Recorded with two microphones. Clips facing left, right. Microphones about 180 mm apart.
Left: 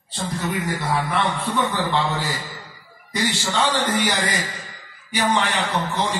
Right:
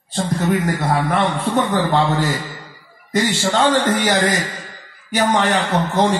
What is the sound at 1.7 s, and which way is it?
A man's voice, 55° right (ahead or behind).